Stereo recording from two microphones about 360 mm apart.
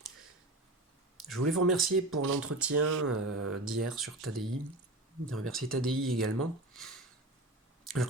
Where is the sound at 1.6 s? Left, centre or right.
Centre.